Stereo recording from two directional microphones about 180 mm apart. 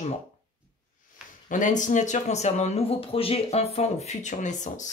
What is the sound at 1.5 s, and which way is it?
Speech, 45° left (ahead or behind).